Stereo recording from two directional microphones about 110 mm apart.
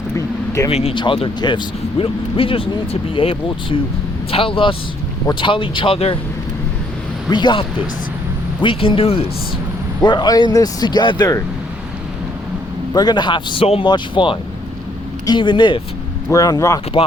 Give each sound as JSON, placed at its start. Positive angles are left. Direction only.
{"t": 0.2, "sound": "vehicle", "side_deg": 30}
{"t": 0.7, "sound": "speech", "side_deg": 75}
{"t": 0.9, "sound": "a man's voice", "side_deg": 50}
{"t": 7.3, "sound": "speech", "side_deg": 45}
{"t": 8.6, "sound": "a man's voice", "side_deg": 55}
{"t": 10.0, "sound": "speech", "side_deg": 40}
{"t": 12.9, "sound": "speech", "side_deg": 40}
{"t": 16.3, "sound": "speech", "side_deg": 35}